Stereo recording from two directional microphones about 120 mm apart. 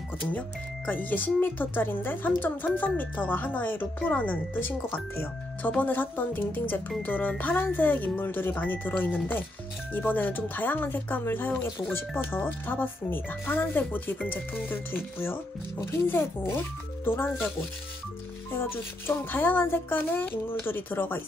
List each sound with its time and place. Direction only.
0.3 s speech: 15° left (ahead or behind)
18.5 s speech: 20° left (ahead or behind)